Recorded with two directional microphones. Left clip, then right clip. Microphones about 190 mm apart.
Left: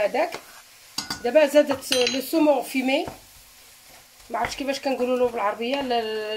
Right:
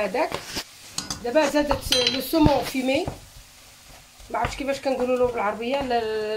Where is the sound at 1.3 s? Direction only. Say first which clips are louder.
Left 3 dB; 20° left (ahead or behind).